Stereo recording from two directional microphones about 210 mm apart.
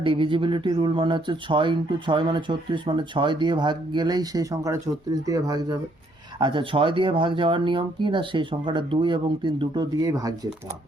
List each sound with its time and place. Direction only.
0.0 s speech: 25° right (ahead or behind)